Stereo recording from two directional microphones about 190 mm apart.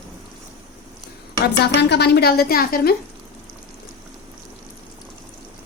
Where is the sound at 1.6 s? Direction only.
60° left (ahead or behind).